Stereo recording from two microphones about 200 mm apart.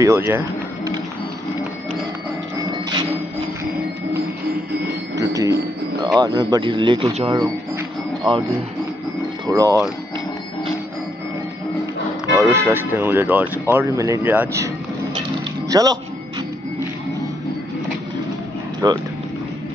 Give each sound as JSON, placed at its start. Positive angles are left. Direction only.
{"t": 0.0, "sound": "a sound", "side_deg": -15}
{"t": 2.9, "sound": "printer", "side_deg": -20}
{"t": 5.1, "sound": "a sound", "side_deg": -15}
{"t": 6.1, "sound": "speech", "side_deg": -20}
{"t": 9.5, "sound": "speech", "side_deg": -15}
{"t": 12.4, "sound": "speech", "side_deg": -10}
{"t": 15.7, "sound": "a man's voice", "side_deg": -20}
{"t": 18.8, "sound": "speech", "side_deg": -20}